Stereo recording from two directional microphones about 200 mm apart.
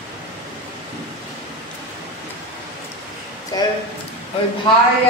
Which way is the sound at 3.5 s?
20° left (ahead or behind).